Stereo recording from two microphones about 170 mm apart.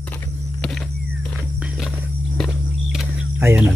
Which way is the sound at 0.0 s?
5° left (ahead or behind).